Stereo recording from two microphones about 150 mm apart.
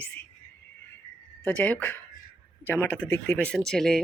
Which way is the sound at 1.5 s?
10° left (ahead or behind).